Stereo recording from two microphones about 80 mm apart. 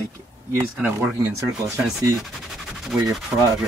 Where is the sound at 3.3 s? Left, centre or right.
Right.